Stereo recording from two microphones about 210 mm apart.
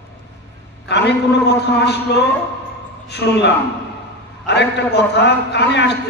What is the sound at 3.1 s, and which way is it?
Speech, 50° left (ahead or behind).